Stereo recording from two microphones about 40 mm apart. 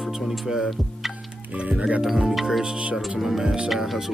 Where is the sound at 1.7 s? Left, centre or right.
Right.